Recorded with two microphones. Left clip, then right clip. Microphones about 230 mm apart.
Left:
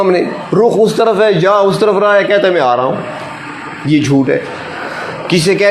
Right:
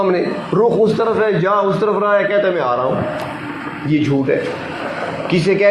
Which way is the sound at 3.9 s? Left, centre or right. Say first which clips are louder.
Left 5 dB; left.